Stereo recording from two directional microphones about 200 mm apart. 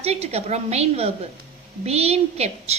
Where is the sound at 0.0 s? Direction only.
30° right (ahead or behind).